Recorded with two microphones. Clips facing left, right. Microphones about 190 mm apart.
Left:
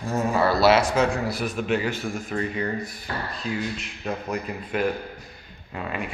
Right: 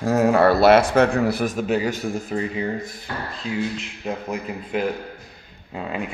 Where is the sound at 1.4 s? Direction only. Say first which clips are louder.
Right 3 dB; 40° right (ahead or behind).